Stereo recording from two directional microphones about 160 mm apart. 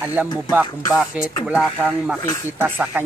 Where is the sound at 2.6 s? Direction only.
10° right (ahead or behind).